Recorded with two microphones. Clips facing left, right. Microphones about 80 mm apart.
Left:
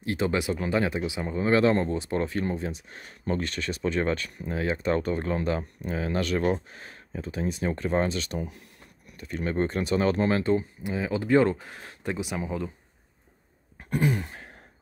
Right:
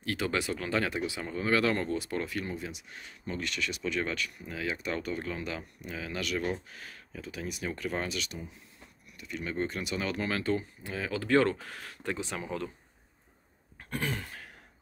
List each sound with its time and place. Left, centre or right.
0.0 s speech: left
8.4 s speech: left
9.1 s speech: left; by 12.7 s centre
13.8 s a sound: centre